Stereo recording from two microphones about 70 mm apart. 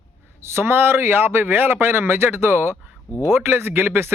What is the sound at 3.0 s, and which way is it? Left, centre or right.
Speech, left.